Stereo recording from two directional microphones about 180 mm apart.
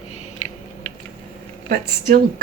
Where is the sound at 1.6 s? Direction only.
55° right (ahead or behind).